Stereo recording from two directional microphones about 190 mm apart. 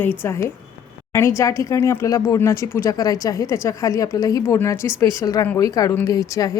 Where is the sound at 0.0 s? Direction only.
10° left (ahead or behind).